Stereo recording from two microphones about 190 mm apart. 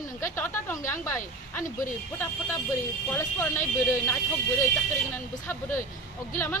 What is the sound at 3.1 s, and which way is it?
A woman's voice, 15° left (ahead or behind).